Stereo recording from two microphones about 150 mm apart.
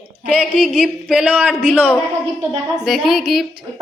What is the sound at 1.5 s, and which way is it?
Speech, 5° left (ahead or behind).